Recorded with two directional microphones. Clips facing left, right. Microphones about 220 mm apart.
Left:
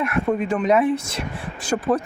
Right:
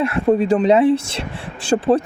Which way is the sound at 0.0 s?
30° right (ahead or behind).